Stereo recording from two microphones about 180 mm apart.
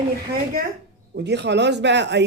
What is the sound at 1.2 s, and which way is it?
Speech, 70° right (ahead or behind).